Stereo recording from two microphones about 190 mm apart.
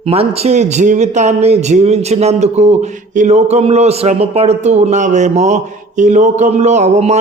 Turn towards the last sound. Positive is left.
turn(degrees=-35)  # may be behind; listen again after turning